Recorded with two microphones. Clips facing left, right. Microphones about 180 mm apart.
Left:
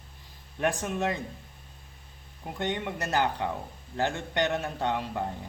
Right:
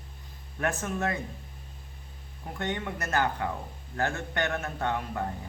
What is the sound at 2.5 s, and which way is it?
A man's voice, 20° left (ahead or behind).